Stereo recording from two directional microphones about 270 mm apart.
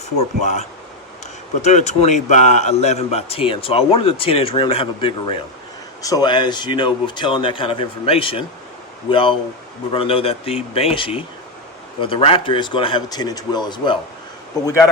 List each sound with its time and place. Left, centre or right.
0.4 s a man's voice: left